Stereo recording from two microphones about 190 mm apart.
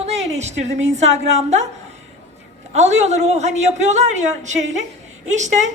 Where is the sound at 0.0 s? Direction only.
35° right (ahead or behind).